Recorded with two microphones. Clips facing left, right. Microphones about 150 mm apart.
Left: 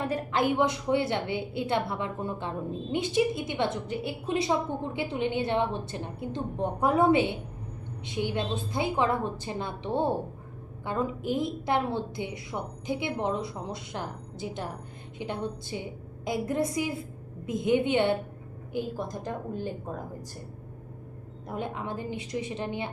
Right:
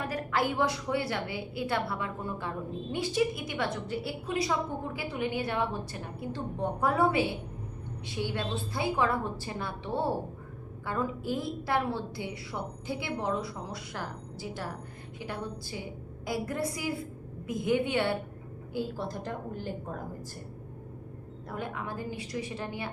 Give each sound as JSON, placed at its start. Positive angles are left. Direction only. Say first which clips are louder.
{"t": 0.0, "sound": "a woman's voice", "louder": "left 3 dB", "side_deg": 25}
{"t": 21.5, "sound": "a woman's voice", "louder": "left 3 dB", "side_deg": 25}